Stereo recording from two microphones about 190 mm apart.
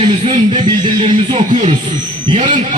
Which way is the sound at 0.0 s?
40° right (ahead or behind).